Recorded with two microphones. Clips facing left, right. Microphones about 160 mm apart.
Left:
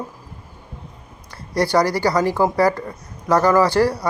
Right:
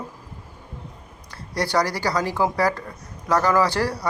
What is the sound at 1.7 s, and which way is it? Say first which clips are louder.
Speech: left 4 dB; 10° left (ahead or behind).